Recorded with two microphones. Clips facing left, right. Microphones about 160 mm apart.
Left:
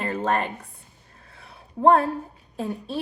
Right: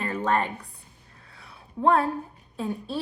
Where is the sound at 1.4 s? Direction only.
55° left (ahead or behind).